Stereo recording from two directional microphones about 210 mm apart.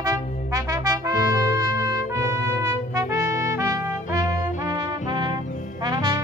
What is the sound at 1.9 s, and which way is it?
Trumpet, 15° right (ahead or behind).